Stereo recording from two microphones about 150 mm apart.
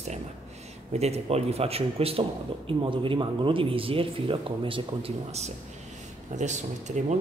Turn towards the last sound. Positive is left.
turn(degrees=-50)  # may be behind; listen again after turning